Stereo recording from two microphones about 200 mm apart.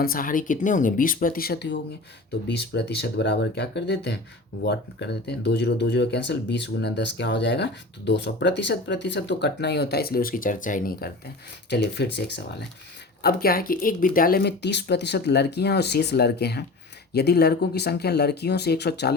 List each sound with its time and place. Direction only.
0.0 s speech: 45° left (ahead or behind)
11.7 s speech: 60° left (ahead or behind)
13.2 s speech: 50° left (ahead or behind)